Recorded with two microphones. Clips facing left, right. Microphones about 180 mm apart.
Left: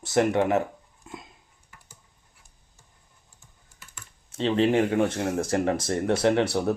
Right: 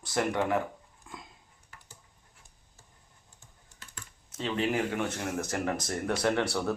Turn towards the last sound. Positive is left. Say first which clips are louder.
# left 6 dB
turn(degrees=20)  # may be behind; listen again after turning